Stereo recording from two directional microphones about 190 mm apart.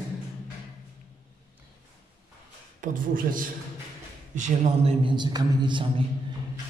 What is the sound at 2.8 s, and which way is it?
Speech, 45° right (ahead or behind).